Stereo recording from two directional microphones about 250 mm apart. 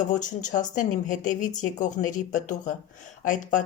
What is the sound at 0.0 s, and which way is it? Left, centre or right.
Speech, left.